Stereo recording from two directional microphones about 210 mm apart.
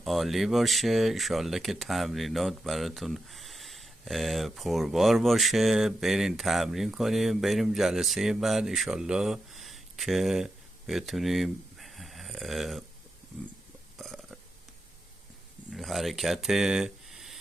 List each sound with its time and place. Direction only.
0.0 s speech: centre (ahead or behind)
14.0 s burping: centre (ahead or behind)
15.7 s speech: centre (ahead or behind)